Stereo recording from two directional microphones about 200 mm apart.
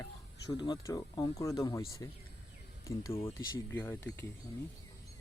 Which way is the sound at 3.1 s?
30° left (ahead or behind).